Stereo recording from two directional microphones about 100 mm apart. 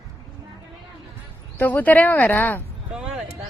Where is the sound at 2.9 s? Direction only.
5° right (ahead or behind).